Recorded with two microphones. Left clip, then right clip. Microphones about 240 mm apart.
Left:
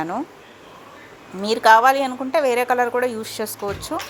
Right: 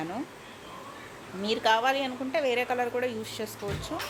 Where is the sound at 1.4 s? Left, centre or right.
Left.